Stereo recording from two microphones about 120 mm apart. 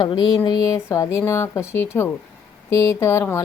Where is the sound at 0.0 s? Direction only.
45° left (ahead or behind).